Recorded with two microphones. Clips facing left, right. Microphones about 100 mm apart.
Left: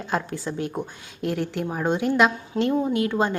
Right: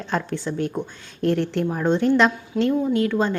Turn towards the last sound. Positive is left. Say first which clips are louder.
# right 2 dB
turn(degrees=20)  # may be behind; listen again after turning